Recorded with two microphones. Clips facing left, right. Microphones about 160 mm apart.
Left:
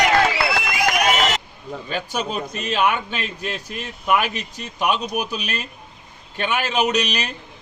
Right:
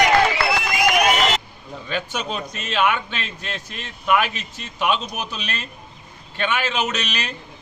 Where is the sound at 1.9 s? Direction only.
45° left (ahead or behind).